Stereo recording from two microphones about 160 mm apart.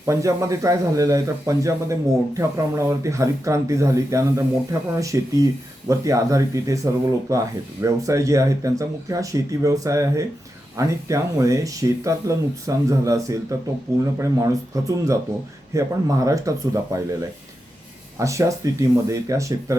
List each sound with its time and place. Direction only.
0.0 s speech: 20° right (ahead or behind)
18.2 s speech: 20° right (ahead or behind)